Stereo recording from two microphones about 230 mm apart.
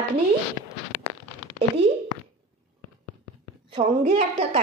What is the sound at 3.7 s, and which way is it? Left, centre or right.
Speech, right.